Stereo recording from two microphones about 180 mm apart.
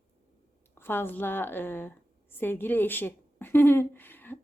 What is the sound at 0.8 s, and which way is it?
Speech, 10° left (ahead or behind).